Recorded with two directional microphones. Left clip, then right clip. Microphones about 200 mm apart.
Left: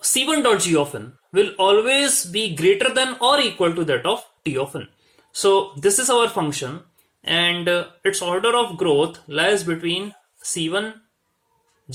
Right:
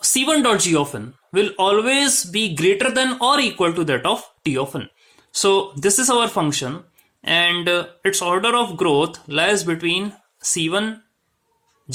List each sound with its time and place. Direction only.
0.0 s speech: 40° right (ahead or behind)